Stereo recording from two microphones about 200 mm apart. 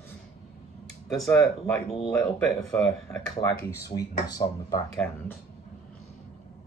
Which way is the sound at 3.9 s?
20° left (ahead or behind).